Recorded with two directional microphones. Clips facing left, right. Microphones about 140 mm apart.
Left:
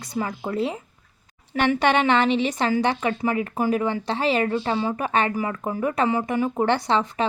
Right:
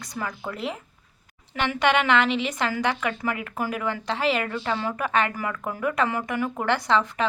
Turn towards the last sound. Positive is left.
turn(degrees=25)  # may be behind; listen again after turning